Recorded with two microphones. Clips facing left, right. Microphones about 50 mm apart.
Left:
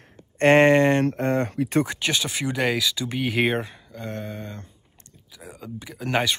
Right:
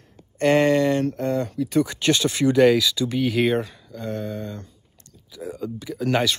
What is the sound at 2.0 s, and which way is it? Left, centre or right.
Speech, centre.